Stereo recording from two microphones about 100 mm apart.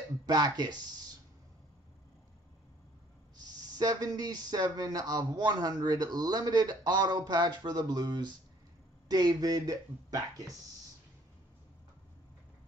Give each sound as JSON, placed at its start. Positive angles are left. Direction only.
{"t": 0.3, "sound": "speech", "side_deg": -45}
{"t": 3.3, "sound": "speech", "side_deg": -40}